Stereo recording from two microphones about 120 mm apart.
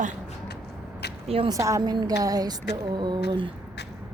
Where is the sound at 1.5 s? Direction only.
25° right (ahead or behind).